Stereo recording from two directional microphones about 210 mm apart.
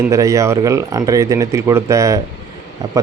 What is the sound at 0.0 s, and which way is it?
Speech, 15° right (ahead or behind).